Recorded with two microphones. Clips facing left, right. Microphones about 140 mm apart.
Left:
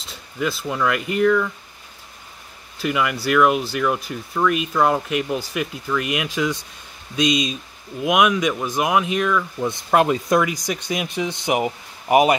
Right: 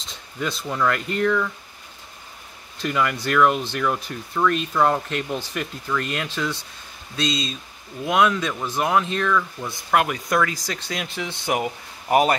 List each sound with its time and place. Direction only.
0.0 s speech: 5° left (ahead or behind)
2.8 s speech: 10° left (ahead or behind)